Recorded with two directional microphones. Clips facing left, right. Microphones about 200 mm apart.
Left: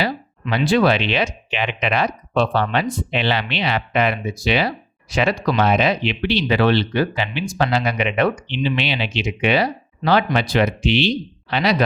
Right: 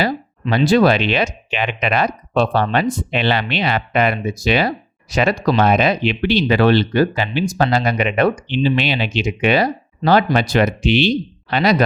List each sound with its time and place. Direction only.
0.5 s speech: 40° right (ahead or behind)